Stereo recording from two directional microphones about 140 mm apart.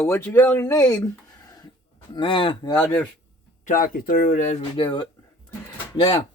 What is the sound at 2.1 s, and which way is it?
Speech, 35° left (ahead or behind).